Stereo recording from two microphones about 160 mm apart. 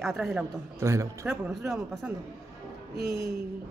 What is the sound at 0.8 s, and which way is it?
Speech, 15° right (ahead or behind).